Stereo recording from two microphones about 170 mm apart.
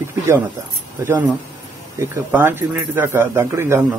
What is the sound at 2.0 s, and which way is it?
A man's voice, 15° right (ahead or behind).